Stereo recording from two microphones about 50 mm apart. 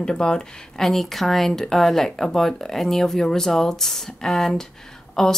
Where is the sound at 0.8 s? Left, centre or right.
Centre.